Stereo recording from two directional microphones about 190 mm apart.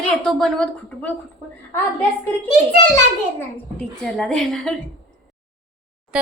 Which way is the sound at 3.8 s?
5° left (ahead or behind).